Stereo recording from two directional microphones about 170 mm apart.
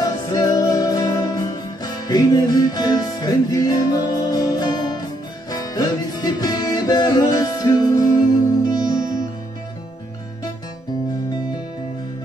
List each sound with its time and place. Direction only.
0.0 s music: 20° left (ahead or behind)